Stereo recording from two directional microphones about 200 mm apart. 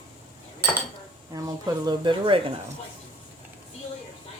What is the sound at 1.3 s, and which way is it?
Speech, 20° right (ahead or behind).